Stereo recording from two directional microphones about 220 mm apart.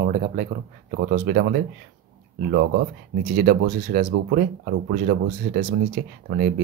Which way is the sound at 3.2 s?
40° right (ahead or behind).